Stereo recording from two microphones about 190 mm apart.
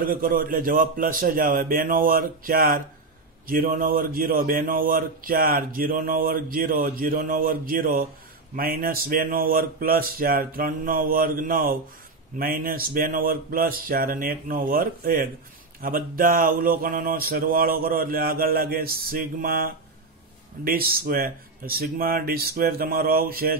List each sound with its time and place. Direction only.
0.0 s a man's voice: 50° right (ahead or behind)